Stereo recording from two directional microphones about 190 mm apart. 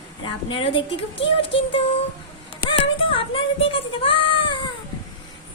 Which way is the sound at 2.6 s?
25° left (ahead or behind).